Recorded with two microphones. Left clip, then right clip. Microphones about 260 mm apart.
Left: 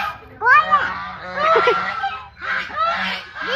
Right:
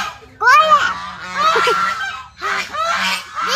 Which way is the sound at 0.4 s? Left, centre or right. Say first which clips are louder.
Right 4 dB; right.